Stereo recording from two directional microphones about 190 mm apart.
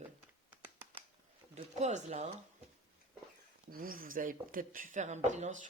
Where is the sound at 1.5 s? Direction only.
35° right (ahead or behind).